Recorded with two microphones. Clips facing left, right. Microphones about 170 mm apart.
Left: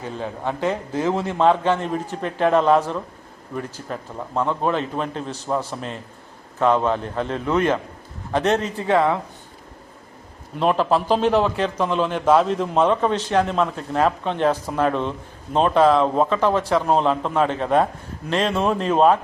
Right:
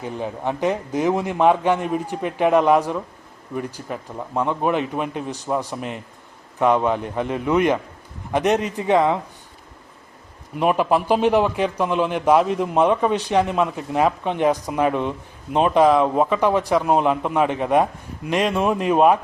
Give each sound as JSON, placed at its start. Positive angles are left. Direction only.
{"t": 0.0, "sound": "a man's voice", "side_deg": -15}
{"t": 10.6, "sound": "a man's voice", "side_deg": -10}